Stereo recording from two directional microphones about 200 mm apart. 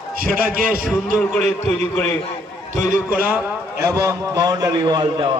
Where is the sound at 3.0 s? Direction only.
10° right (ahead or behind).